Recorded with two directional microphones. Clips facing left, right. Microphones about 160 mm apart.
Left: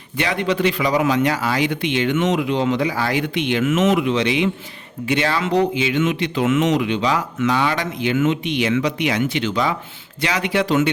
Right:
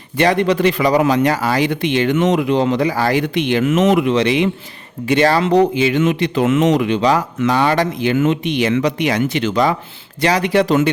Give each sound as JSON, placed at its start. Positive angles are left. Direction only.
{"t": 0.2, "sound": "speech", "side_deg": -40}
{"t": 3.9, "sound": "speech", "side_deg": -50}